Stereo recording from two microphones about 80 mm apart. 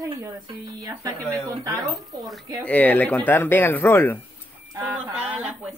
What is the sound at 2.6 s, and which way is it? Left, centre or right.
Speech, centre.